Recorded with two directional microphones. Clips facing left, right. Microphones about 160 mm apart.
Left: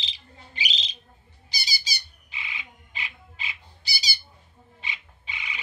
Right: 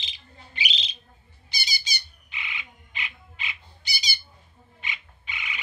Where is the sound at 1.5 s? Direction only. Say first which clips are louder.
Right 1 dB; 35° left (ahead or behind).